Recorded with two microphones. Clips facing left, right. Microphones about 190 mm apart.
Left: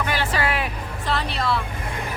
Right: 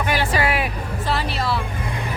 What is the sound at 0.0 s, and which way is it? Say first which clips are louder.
Music: right 3 dB; 15° right (ahead or behind).